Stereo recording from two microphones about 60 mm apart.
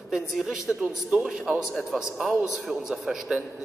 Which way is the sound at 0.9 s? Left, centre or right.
Centre.